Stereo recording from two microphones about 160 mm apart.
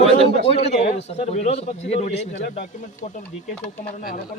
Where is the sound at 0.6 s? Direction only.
40° left (ahead or behind).